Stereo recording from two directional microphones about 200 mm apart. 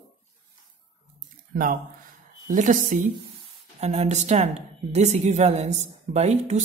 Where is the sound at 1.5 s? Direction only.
45° right (ahead or behind).